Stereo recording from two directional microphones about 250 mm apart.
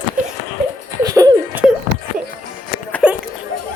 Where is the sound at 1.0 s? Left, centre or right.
Centre.